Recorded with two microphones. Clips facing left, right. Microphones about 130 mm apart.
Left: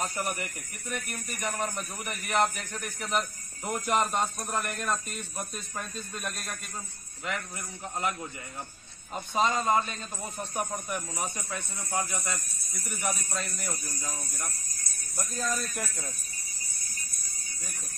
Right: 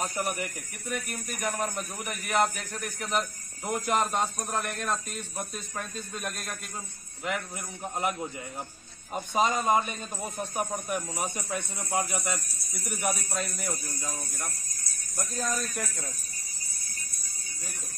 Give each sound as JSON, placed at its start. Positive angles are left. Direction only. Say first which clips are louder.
{"t": 0.0, "sound": "a man's voice", "louder": "right 1 dB", "side_deg": 0}
{"t": 7.2, "sound": "speech", "louder": "right 2 dB", "side_deg": -10}
{"t": 10.5, "sound": "speech", "louder": "right 1 dB", "side_deg": 0}
{"t": 15.1, "sound": "a man's voice", "louder": "right 1 dB", "side_deg": 0}